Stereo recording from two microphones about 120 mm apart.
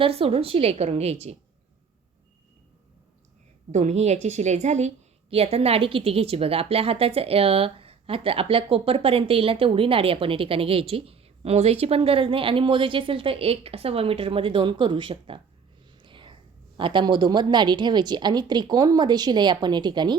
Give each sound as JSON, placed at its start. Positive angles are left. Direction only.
{"t": 0.0, "sound": "a woman's voice", "side_deg": -55}
{"t": 3.7, "sound": "a woman's voice", "side_deg": -70}
{"t": 5.3, "sound": "a woman's voice", "side_deg": -55}
{"t": 16.0, "sound": "whispering", "side_deg": -45}
{"t": 16.7, "sound": "a woman's voice", "side_deg": -45}